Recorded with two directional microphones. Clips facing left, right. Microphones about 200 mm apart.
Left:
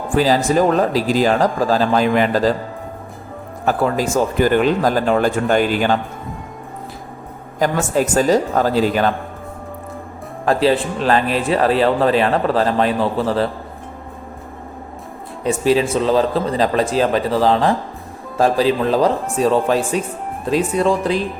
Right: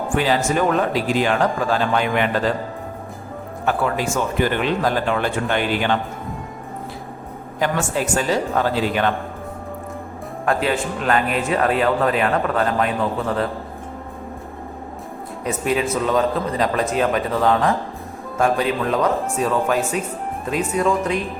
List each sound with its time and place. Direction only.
0.1 s speech: 35° left (ahead or behind)
3.7 s speech: 40° left (ahead or behind)
7.6 s speech: 40° left (ahead or behind)
10.4 s speech: 30° left (ahead or behind)
15.4 s speech: 30° left (ahead or behind)